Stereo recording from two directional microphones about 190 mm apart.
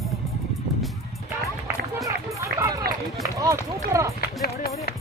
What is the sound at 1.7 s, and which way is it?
Run, 15° right (ahead or behind).